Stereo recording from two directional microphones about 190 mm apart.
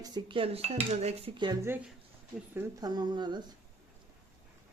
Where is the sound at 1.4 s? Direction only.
20° right (ahead or behind).